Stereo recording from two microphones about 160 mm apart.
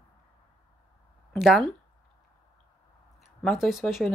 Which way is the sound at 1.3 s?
Centre (ahead or behind).